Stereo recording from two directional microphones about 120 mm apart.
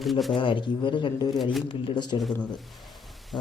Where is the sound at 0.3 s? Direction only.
45° left (ahead or behind).